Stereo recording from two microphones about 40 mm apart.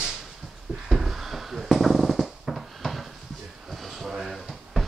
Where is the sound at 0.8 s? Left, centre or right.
Centre.